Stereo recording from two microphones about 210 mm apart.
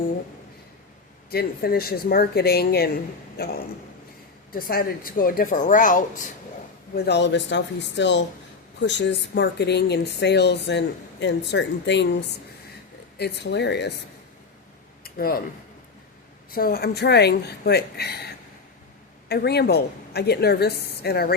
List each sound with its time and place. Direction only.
1.3 s speech: 45° left (ahead or behind)
6.9 s speech: 50° left (ahead or behind)
13.1 s speech: 50° left (ahead or behind)
15.0 s a sound: 45° left (ahead or behind)
16.5 s speech: 45° left (ahead or behind)
19.3 s speech: 50° left (ahead or behind)